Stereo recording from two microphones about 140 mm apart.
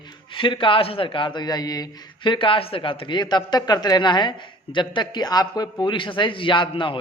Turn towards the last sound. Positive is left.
turn(degrees=35)  # may be behind; listen again after turning